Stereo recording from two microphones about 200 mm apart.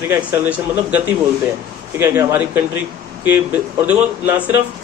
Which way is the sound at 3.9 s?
10° right (ahead or behind).